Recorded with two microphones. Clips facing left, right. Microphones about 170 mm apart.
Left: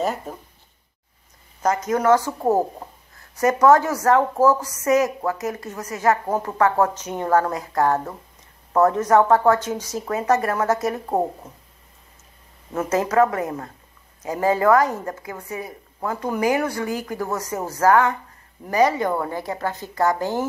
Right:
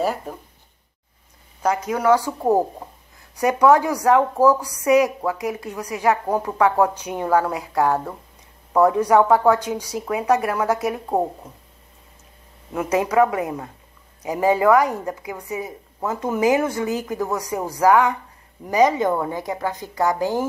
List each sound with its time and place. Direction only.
0.0 s a woman's voice: 5° right (ahead or behind)
1.6 s a woman's voice: 10° right (ahead or behind)
2.4 s speech: 5° left (ahead or behind)
3.3 s a woman's voice: 10° right (ahead or behind)
12.7 s a woman's voice: 10° right (ahead or behind)